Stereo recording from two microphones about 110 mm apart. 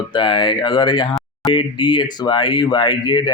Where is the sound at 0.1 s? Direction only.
45° left (ahead or behind).